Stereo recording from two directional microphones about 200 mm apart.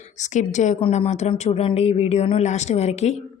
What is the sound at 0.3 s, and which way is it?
Speech, 35° left (ahead or behind).